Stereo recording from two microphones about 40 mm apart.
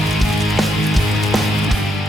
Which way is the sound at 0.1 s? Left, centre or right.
Centre.